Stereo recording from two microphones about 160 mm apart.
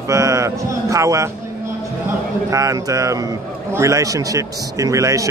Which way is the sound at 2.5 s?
20° right (ahead or behind).